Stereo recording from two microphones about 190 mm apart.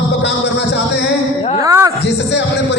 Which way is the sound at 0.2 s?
60° left (ahead or behind).